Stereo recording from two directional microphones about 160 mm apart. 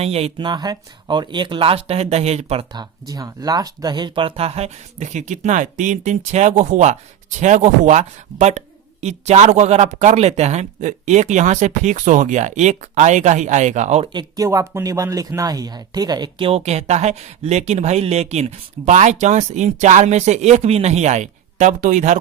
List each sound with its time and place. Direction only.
0.0 s speech: 40° right (ahead or behind)
2.7 s speech: 25° right (ahead or behind); by 14.1 s 45° right (ahead or behind)
14.1 s speech: 25° right (ahead or behind); by 22.2 s 50° right (ahead or behind)